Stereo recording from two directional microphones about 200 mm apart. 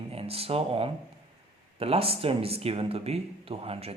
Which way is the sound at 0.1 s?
30° right (ahead or behind).